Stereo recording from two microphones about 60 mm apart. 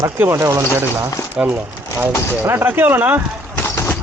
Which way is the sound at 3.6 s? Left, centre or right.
Left.